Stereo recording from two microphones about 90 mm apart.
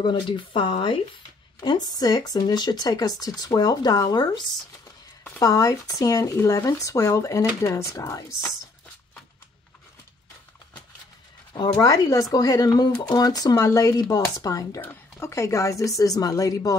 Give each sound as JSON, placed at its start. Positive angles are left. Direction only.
{"t": 0.0, "sound": "speech", "side_deg": 65}
{"t": 1.6, "sound": "speech", "side_deg": 50}
{"t": 5.4, "sound": "a woman's voice", "side_deg": 40}
{"t": 11.8, "sound": "a woman's voice", "side_deg": 40}
{"t": 14.8, "sound": "a woman's voice", "side_deg": 30}